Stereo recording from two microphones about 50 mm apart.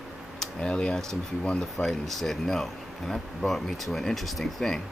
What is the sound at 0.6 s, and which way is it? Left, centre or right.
Speech, left.